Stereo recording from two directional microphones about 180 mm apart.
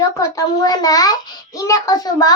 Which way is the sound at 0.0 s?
20° left (ahead or behind).